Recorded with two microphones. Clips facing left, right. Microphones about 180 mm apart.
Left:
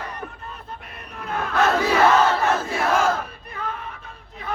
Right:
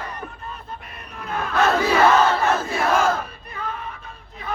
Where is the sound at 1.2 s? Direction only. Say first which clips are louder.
Even; 60° left (ahead or behind).